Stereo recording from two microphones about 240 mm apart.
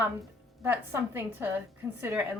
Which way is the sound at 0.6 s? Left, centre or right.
Centre.